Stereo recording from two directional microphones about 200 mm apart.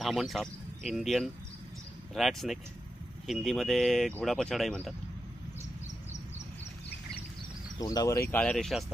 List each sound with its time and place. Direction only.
0.0 s speech: centre (ahead or behind)
7.8 s speech: 20° left (ahead or behind)
8.3 s speech: 5° left (ahead or behind)